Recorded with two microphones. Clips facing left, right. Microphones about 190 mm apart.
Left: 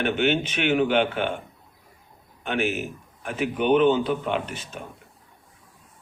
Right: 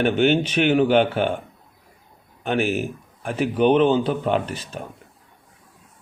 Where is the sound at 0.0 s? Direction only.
35° right (ahead or behind).